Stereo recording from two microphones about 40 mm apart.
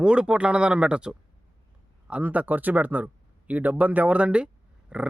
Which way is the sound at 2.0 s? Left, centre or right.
Right.